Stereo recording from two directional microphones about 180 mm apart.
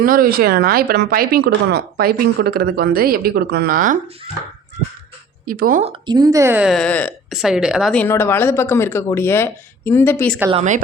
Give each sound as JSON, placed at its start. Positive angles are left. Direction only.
{"t": 0.0, "sound": "speech", "side_deg": -55}
{"t": 5.5, "sound": "speech", "side_deg": -50}
{"t": 5.8, "sound": "a woman's voice", "side_deg": -25}
{"t": 6.7, "sound": "a woman's voice", "side_deg": 5}
{"t": 8.0, "sound": "speech", "side_deg": 10}
{"t": 10.5, "sound": "speech", "side_deg": -40}